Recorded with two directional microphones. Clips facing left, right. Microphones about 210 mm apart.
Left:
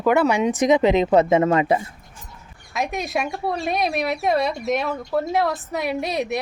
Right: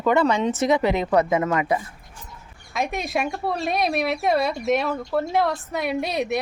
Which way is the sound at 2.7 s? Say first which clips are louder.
Even; centre (ahead or behind).